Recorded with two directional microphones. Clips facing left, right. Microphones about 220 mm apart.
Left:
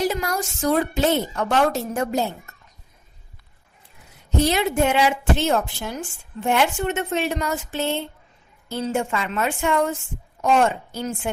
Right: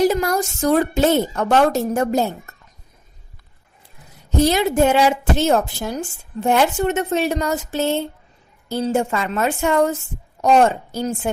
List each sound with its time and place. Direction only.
0.0 s a woman's voice: 45° right (ahead or behind)
4.4 s a woman's voice: 40° right (ahead or behind)